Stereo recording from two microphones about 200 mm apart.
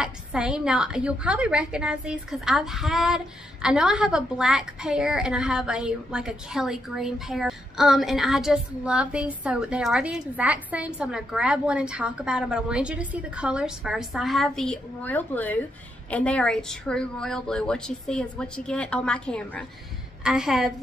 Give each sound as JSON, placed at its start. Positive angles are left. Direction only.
{"t": 0.0, "sound": "a woman's voice", "side_deg": -5}